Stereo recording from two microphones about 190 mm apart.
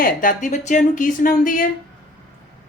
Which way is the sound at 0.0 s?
45° left (ahead or behind).